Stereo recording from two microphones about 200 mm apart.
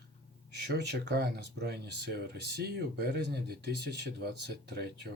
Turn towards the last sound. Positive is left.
turn(degrees=-55)  # may be behind; listen again after turning